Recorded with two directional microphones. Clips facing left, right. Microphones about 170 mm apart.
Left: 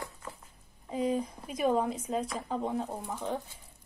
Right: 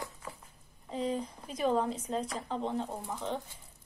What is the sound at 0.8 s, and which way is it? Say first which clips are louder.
Speech: left 3 dB; 10° left (ahead or behind).